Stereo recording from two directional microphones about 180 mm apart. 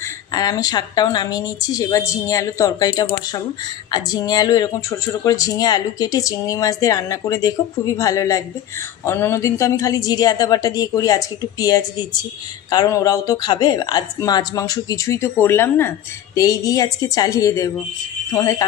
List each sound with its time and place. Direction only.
0.0 s speech: 20° left (ahead or behind)